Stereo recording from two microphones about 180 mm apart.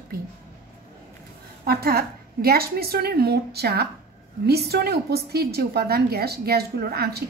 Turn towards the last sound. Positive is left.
turn(degrees=-60)  # may be behind; listen again after turning